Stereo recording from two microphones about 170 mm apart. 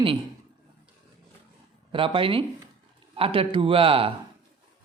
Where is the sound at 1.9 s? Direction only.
30° right (ahead or behind).